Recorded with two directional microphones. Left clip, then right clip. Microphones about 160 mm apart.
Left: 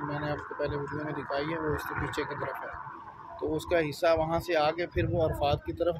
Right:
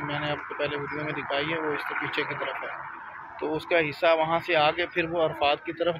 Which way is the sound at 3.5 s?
5° left (ahead or behind).